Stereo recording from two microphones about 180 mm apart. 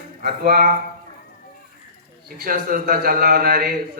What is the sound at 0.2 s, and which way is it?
Speech, 55° right (ahead or behind).